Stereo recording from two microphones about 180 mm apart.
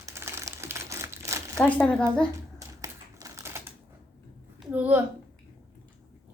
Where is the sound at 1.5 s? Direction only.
5° left (ahead or behind).